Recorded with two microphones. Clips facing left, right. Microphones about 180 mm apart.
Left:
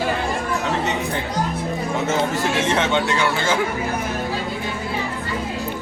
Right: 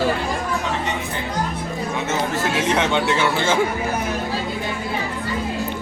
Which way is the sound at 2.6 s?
10° right (ahead or behind).